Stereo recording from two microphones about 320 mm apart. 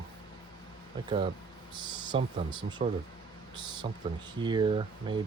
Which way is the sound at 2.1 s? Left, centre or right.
Centre.